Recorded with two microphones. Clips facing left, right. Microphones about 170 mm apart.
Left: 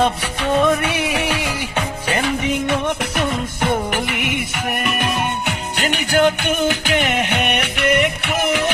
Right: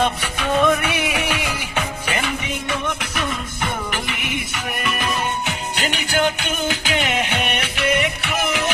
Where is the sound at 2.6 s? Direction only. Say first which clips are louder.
Left 5 dB; 55° left (ahead or behind).